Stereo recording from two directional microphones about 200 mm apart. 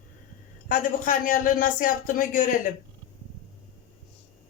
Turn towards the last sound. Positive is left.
turn(degrees=40)  # may be behind; listen again after turning